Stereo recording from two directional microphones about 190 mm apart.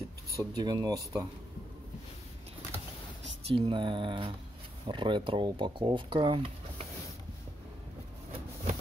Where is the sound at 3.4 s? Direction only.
30° right (ahead or behind).